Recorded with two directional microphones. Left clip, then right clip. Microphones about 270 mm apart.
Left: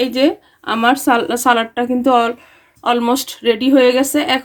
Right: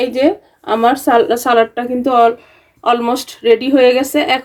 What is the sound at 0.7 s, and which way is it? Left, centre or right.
Speech, left.